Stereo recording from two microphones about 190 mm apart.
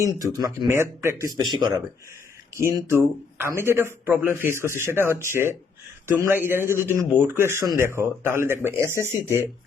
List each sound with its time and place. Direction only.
0.0 s a man's voice: 15° right (ahead or behind)
2.6 s a man's voice: 15° right (ahead or behind)